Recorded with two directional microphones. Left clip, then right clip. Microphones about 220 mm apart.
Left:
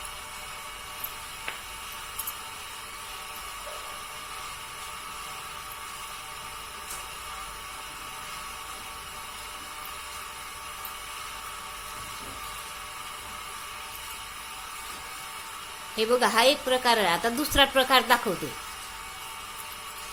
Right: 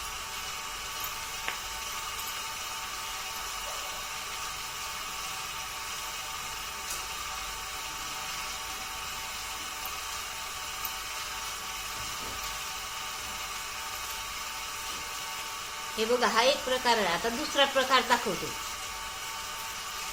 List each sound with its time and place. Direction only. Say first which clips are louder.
16.0 s a woman's voice: left 3 dB; 45° left (ahead or behind)